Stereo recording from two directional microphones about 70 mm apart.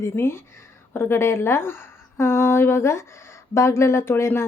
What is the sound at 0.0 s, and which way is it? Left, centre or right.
A woman's voice, left.